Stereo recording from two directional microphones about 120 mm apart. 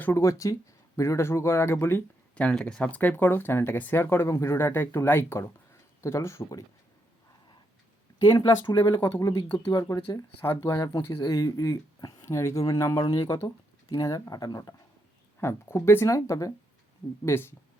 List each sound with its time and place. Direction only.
0.0 s speech: 25° left (ahead or behind)
8.2 s speech: 35° left (ahead or behind)
10.8 s speech: 35° left (ahead or behind)
15.4 s speech: 20° left (ahead or behind)